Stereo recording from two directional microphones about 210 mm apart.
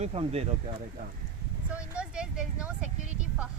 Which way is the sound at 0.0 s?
30° right (ahead or behind).